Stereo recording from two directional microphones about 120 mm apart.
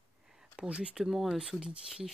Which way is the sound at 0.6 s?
10° right (ahead or behind).